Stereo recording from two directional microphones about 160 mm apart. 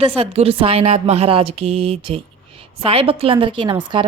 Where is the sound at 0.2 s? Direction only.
40° right (ahead or behind).